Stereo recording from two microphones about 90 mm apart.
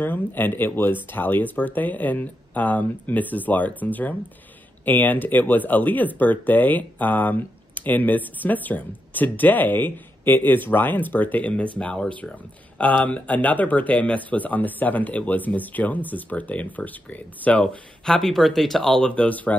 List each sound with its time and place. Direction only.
0.0 s speech: 20° left (ahead or behind)